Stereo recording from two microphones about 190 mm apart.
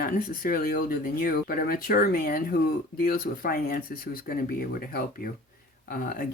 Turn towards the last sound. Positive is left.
turn(degrees=45)  # may be behind; listen again after turning